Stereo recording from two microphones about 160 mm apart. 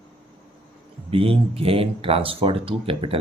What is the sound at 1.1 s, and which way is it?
Speech, 35° right (ahead or behind).